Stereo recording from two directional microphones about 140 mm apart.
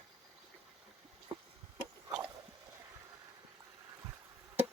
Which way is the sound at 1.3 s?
40° right (ahead or behind).